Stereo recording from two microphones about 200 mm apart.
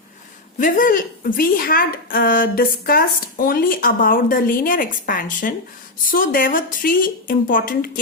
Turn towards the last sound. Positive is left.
turn(degrees=45)  # may be behind; listen again after turning